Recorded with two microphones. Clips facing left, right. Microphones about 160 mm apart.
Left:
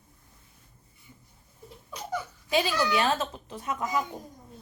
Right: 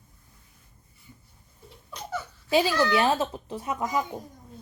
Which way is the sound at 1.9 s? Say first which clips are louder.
Left 1 dB; 10° left (ahead or behind).